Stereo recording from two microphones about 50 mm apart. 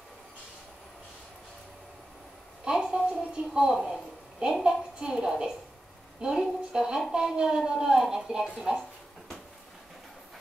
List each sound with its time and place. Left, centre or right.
2.6 s a sound: centre
3.1 s music: centre
3.7 s a woman's voice: centre